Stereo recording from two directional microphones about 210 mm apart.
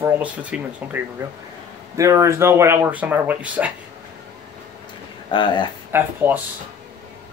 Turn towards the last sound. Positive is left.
turn(degrees=-10)  # may be behind; listen again after turning